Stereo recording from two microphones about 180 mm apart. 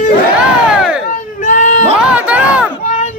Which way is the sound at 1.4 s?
45° left (ahead or behind).